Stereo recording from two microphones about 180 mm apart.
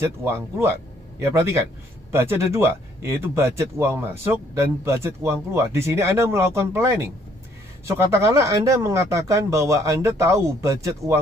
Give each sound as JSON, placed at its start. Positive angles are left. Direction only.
{"t": 0.0, "sound": "speech", "side_deg": -15}